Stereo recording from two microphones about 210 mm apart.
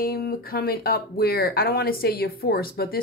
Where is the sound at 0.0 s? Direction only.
45° left (ahead or behind).